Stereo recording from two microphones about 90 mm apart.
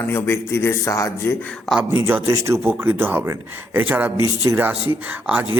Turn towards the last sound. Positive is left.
turn(degrees=-20)  # may be behind; listen again after turning